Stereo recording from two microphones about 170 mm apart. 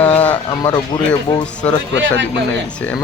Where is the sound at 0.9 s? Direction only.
25° left (ahead or behind).